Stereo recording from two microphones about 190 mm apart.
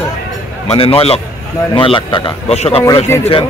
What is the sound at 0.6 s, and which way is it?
A man's voice, 30° left (ahead or behind).